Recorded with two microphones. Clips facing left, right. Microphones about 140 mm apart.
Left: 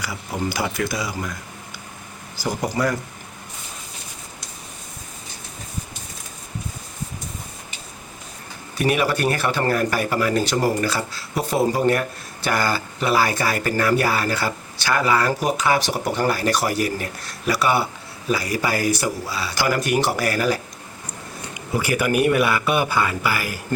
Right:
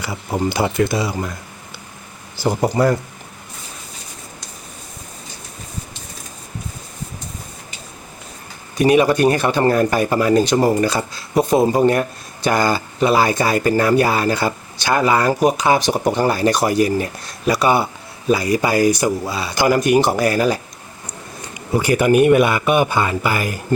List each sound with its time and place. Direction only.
0.0 s speech: 25° right (ahead or behind)
8.8 s speech: 20° right (ahead or behind)
21.8 s speech: 25° right (ahead or behind)